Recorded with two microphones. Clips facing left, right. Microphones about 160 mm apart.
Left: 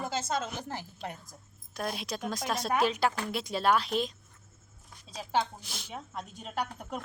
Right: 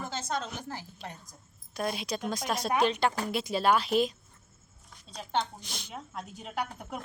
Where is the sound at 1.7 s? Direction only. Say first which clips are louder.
Right 3 dB; centre (ahead or behind).